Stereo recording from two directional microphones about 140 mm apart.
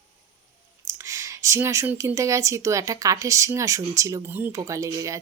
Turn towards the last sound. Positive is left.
turn(degrees=-25)  # may be behind; listen again after turning